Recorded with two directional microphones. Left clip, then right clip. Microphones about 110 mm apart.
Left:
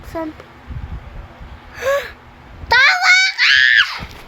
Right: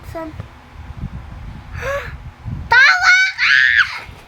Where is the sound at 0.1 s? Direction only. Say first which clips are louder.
Left 3 dB; 10° right (ahead or behind).